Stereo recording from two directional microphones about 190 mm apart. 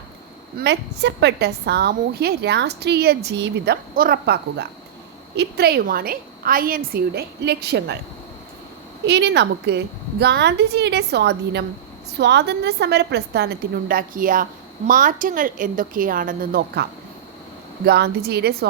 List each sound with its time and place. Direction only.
0.6 s a woman's voice: 65° right (ahead or behind)
9.0 s a woman's voice: 65° right (ahead or behind)
17.8 s a woman's voice: 55° right (ahead or behind)